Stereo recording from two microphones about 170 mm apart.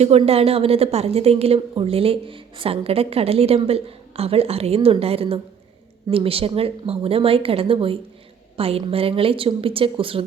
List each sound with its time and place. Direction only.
0.0 s a woman's voice: 35° right (ahead or behind)